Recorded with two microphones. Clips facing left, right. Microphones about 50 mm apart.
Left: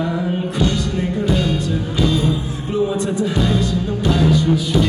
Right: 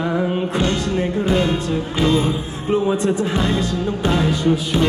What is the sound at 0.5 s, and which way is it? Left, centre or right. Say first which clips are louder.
Music: even; right.